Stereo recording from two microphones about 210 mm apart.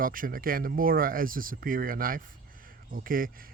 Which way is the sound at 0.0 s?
40° right (ahead or behind).